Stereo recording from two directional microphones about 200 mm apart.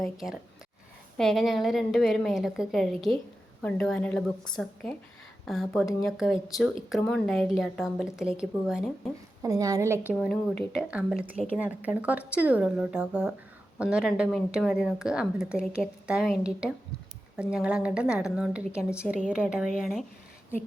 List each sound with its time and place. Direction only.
0.0 s a woman's voice: centre (ahead or behind)
9.4 s speech: 20° right (ahead or behind)
10.2 s a woman's voice: 5° left (ahead or behind)